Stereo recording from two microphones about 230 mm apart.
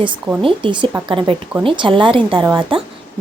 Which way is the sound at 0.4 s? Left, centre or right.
Right.